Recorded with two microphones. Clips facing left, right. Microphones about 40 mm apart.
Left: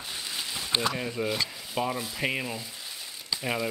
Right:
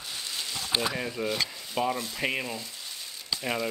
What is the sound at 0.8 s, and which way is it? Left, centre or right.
Speech, centre.